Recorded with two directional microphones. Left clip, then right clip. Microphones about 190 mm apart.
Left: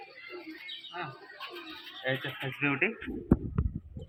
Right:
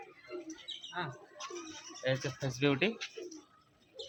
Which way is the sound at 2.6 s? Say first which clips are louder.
Left 2 dB; 60° right (ahead or behind).